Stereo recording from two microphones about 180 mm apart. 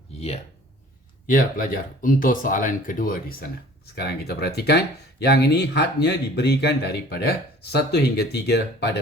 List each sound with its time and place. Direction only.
1.3 s speech: 50° left (ahead or behind)
3.9 s speech: 65° left (ahead or behind)